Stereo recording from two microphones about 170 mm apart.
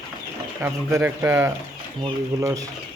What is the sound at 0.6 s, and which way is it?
Speech, 15° right (ahead or behind).